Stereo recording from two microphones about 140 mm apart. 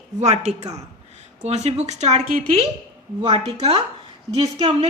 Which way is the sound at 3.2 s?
30° right (ahead or behind).